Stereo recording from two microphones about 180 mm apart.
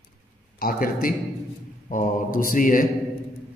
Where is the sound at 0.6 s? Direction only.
50° left (ahead or behind).